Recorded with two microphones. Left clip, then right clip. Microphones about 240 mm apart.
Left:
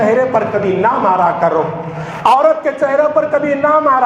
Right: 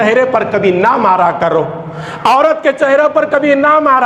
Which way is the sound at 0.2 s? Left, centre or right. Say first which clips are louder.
Right 2 dB; right.